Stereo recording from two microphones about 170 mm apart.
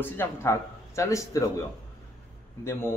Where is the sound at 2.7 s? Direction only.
15° left (ahead or behind).